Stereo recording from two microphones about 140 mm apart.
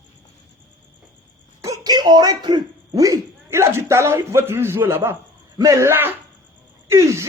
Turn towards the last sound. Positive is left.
turn(degrees=-20)  # may be behind; listen again after turning